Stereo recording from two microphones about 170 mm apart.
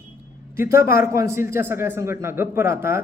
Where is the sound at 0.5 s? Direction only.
15° right (ahead or behind).